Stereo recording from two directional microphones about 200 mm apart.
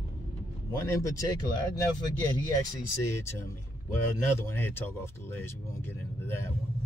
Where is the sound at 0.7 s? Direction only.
15° left (ahead or behind).